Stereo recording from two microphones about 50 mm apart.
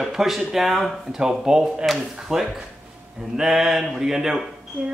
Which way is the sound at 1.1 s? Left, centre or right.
Centre.